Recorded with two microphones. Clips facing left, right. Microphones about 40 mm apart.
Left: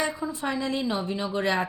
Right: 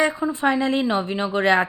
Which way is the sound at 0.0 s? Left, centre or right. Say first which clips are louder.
Right 8 dB; right.